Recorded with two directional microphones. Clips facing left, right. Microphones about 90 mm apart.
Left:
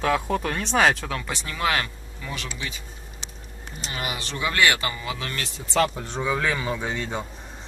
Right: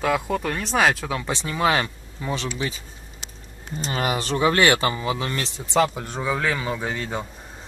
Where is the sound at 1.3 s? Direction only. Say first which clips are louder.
Right 5 dB; 20° right (ahead or behind).